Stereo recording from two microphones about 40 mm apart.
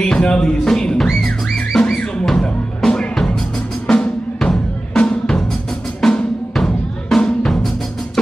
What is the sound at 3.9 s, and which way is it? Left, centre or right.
Drum, centre.